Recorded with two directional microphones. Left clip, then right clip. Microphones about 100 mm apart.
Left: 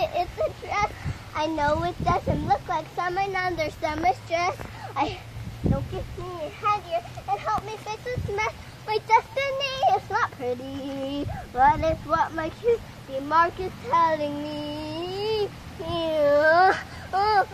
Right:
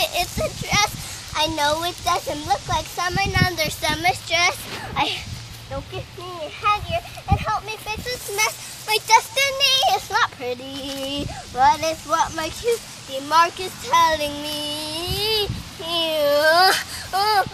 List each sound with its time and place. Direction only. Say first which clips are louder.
0.0 s a sound: right 3 dB; centre (ahead or behind)
0.4 s speech: right 7 dB; 5° right (ahead or behind)
5.9 s a child's voice: right 2 dB; 20° right (ahead or behind)
11.5 s a child's voice: right 3 dB; 30° right (ahead or behind)
13.3 s child singing: right 4 dB; 20° right (ahead or behind); by 15.4 s 5° left (ahead or behind)
15.8 s speech: right 3 dB; 15° right (ahead or behind)